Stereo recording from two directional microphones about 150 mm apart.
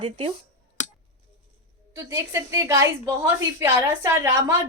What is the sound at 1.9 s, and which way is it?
A woman's voice, 20° right (ahead or behind).